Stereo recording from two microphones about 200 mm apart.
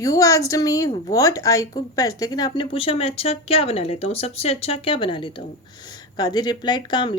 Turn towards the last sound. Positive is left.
turn(degrees=20)  # may be behind; listen again after turning